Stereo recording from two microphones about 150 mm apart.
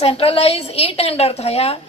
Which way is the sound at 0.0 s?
40° left (ahead or behind).